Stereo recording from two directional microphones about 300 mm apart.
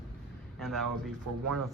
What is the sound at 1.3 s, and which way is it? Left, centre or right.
Speech, right.